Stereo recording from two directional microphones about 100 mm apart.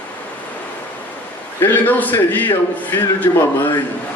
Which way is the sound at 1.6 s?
20° left (ahead or behind).